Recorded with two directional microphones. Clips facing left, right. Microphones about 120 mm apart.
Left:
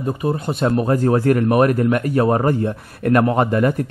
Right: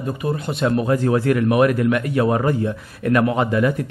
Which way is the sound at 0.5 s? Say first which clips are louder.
Even; 45° left (ahead or behind).